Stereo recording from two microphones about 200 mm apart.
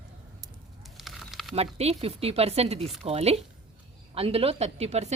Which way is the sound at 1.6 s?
30° right (ahead or behind).